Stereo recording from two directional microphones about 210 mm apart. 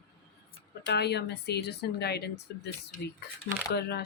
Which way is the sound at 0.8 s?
50° left (ahead or behind).